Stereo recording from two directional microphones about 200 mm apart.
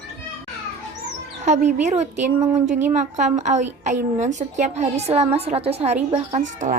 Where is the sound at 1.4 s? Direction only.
35° right (ahead or behind).